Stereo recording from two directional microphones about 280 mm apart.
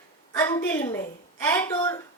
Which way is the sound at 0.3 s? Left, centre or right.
Centre.